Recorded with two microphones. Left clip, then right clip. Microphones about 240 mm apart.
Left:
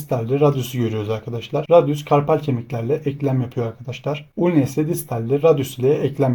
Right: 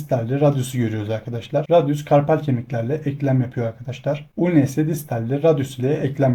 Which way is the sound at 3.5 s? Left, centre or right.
Left.